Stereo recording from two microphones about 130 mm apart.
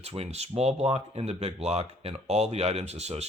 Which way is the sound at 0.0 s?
50° right (ahead or behind).